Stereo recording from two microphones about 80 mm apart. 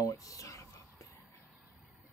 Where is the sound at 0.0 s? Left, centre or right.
Left.